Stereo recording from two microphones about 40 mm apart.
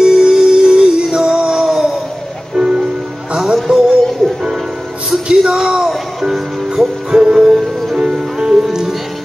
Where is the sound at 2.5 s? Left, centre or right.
Centre.